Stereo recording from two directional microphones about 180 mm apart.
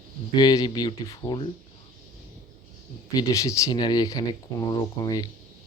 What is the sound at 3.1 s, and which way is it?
Speech, 20° left (ahead or behind).